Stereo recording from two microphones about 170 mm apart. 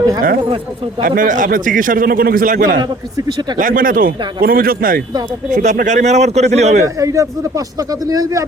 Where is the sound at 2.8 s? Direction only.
25° right (ahead or behind).